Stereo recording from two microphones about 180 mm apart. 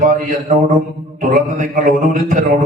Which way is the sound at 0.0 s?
50° right (ahead or behind).